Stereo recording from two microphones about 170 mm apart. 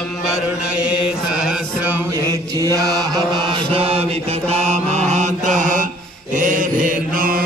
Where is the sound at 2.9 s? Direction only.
20° right (ahead or behind); by 7.5 s 55° right (ahead or behind).